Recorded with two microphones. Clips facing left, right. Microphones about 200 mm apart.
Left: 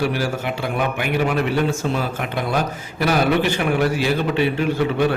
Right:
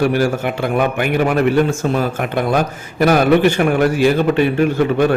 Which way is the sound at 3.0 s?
50° right (ahead or behind).